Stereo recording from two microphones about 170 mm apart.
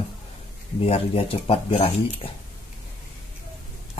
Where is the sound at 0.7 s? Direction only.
35° left (ahead or behind).